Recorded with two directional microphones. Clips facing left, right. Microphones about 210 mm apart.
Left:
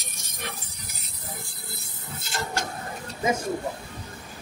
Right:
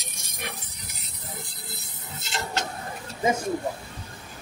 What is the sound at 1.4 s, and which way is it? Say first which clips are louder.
Printer: even; 20° right (ahead or behind).